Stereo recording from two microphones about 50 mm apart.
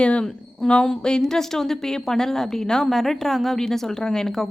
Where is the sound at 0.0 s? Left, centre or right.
Left.